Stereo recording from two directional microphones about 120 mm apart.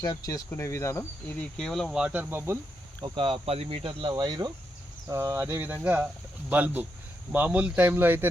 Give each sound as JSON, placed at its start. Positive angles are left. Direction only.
{"t": 0.0, "sound": "speech", "side_deg": 30}
{"t": 0.5, "sound": "cricket", "side_deg": 25}
{"t": 1.5, "sound": "speech", "side_deg": 5}
{"t": 2.5, "sound": "speech", "side_deg": -20}
{"t": 3.0, "sound": "speech", "side_deg": -50}
{"t": 4.1, "sound": "speech", "side_deg": -35}
{"t": 5.0, "sound": "speech", "side_deg": -20}